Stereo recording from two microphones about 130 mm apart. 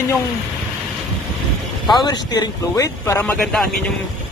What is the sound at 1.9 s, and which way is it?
Speech, 30° left (ahead or behind).